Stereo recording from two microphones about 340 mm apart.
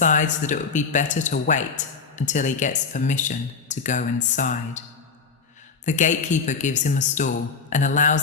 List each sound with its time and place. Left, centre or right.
0.0 s speech: left
5.8 s speech: left